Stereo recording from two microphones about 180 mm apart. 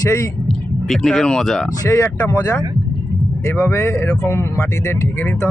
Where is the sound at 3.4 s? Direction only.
15° left (ahead or behind).